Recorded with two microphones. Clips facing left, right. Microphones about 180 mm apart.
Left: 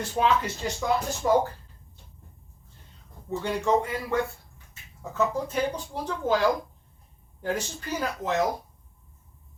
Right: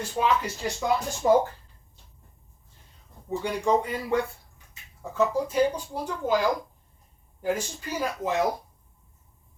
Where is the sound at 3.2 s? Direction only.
15° right (ahead or behind).